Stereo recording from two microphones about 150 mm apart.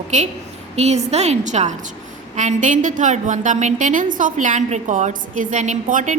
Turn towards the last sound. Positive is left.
turn(degrees=-60)  # may be behind; listen again after turning